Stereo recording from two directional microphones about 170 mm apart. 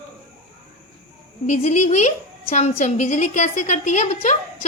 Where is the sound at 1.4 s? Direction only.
45° left (ahead or behind).